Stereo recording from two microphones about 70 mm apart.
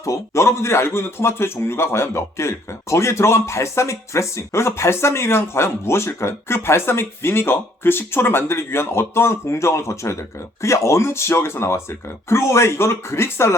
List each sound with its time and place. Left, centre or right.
0.0 s speech: left